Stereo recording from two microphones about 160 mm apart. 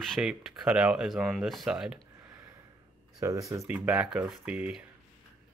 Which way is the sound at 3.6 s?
5° right (ahead or behind).